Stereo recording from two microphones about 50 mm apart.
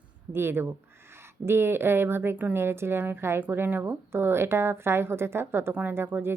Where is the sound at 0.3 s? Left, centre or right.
Right.